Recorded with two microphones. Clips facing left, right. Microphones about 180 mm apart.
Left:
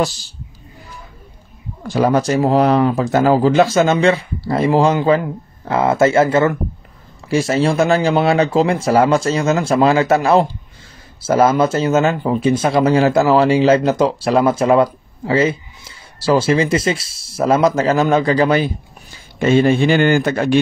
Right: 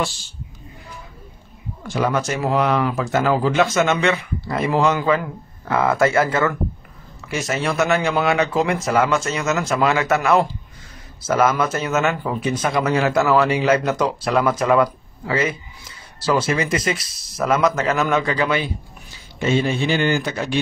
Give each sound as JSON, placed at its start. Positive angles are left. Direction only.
{"t": 0.0, "sound": "speech", "side_deg": 40}
{"t": 1.8, "sound": "speech", "side_deg": 35}
{"t": 19.1, "sound": "a man's voice", "side_deg": 50}